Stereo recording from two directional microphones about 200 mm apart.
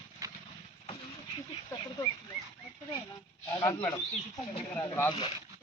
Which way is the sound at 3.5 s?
20° left (ahead or behind).